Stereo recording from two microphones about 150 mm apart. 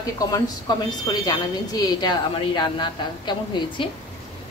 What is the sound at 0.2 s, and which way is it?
A woman's voice, 25° left (ahead or behind).